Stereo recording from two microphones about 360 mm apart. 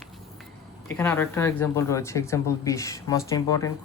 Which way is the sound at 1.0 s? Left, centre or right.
Centre.